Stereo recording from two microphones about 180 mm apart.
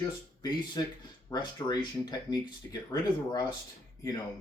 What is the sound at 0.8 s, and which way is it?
Speech, 20° left (ahead or behind).